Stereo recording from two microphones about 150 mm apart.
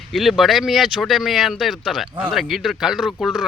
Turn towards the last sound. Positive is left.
turn(degrees=0)  # may be behind; listen again after turning